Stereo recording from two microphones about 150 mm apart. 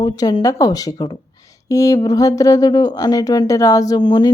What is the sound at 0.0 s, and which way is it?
Speech, 30° left (ahead or behind).